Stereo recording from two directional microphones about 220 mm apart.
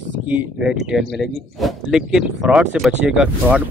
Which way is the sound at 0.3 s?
5° right (ahead or behind).